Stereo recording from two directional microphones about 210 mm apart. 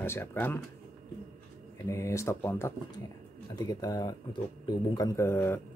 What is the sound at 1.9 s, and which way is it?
Speech, 15° left (ahead or behind).